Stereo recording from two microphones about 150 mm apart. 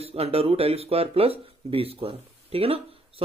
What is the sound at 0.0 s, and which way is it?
Speech, 40° right (ahead or behind).